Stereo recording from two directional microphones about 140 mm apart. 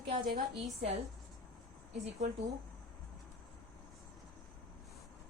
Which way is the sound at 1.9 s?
50° right (ahead or behind).